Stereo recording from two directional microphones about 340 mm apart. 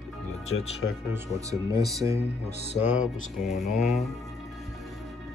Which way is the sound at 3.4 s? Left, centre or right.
Centre.